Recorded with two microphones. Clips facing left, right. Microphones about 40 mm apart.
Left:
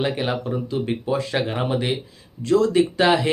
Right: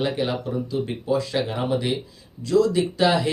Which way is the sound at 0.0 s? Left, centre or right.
Left.